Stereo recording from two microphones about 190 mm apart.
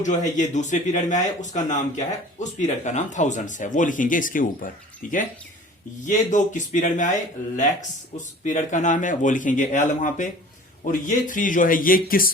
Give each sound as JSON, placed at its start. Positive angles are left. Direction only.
{"t": 0.0, "sound": "speech", "side_deg": 40}
{"t": 6.1, "sound": "a man's voice", "side_deg": 40}